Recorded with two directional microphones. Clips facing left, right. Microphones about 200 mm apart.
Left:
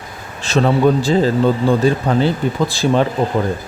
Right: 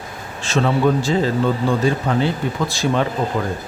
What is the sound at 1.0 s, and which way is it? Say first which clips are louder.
Speech: left 4 dB; 35° left (ahead or behind).